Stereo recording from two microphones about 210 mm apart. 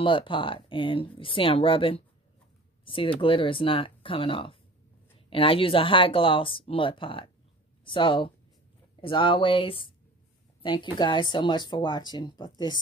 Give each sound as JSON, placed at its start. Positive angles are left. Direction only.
{"t": 0.0, "sound": "speech", "side_deg": 25}